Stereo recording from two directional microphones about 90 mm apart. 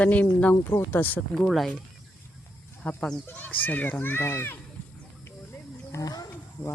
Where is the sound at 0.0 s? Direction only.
15° left (ahead or behind).